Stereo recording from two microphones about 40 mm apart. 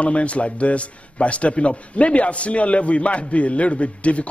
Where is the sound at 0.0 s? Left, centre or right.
Left.